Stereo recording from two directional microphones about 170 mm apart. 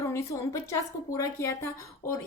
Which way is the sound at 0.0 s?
15° left (ahead or behind).